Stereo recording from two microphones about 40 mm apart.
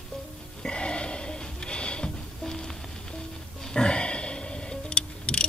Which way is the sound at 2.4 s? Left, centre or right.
Centre.